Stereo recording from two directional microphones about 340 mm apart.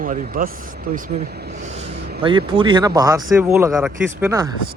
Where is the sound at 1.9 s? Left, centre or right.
Right.